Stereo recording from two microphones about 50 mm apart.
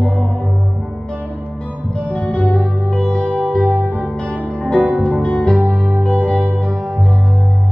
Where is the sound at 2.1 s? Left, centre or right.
Left.